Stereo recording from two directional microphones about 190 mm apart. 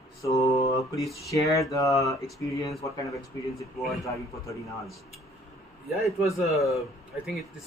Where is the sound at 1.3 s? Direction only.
15° left (ahead or behind).